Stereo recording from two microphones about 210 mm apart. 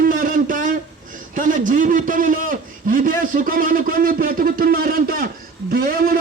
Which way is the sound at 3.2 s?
40° right (ahead or behind).